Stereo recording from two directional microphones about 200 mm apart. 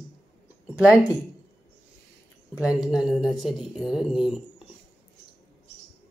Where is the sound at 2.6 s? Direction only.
5° right (ahead or behind).